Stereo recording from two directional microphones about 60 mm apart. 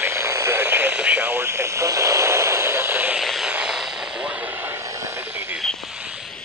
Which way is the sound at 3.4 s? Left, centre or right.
Centre.